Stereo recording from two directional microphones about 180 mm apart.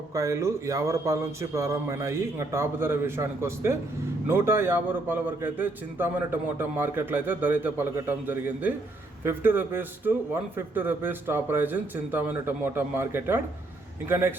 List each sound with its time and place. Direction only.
0.1 s a man's voice: 15° right (ahead or behind)